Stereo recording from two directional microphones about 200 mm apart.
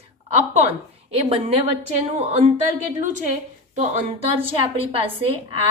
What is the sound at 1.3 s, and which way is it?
Speech, 30° right (ahead or behind).